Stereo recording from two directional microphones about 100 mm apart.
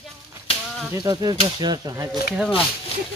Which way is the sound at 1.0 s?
45° right (ahead or behind).